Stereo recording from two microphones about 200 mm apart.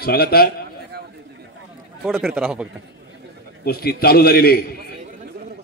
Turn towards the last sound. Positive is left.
turn(degrees=50)  # may be behind; listen again after turning